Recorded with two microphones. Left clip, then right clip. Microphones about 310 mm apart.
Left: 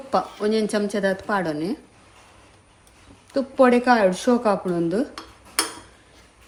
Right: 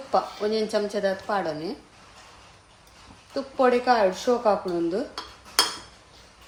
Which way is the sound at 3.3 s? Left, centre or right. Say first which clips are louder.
Left 4 dB; left.